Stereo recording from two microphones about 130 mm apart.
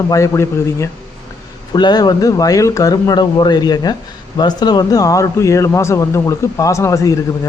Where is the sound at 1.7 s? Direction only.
35° left (ahead or behind).